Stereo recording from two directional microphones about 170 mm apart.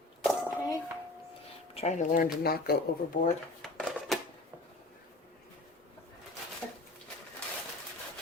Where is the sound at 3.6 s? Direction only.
Centre (ahead or behind).